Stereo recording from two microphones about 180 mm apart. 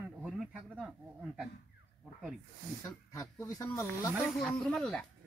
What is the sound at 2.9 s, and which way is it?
Speech, 20° left (ahead or behind).